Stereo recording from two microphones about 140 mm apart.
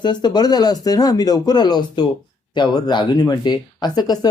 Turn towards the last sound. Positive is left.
turn(degrees=30)  # may be behind; listen again after turning